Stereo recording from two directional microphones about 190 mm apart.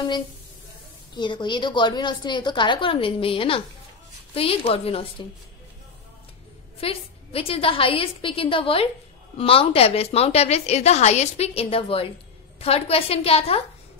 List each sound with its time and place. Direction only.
1.1 s a woman's voice: 25° left (ahead or behind)
6.8 s a woman's voice: 30° left (ahead or behind)